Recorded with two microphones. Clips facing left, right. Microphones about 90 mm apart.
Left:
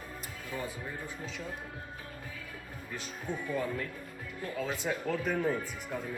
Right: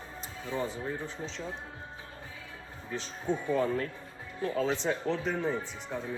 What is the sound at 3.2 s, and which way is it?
Speech, 30° right (ahead or behind).